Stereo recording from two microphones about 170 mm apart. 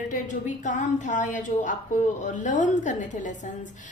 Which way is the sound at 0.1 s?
45° left (ahead or behind).